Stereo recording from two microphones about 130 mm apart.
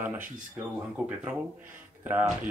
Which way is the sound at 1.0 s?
5° right (ahead or behind).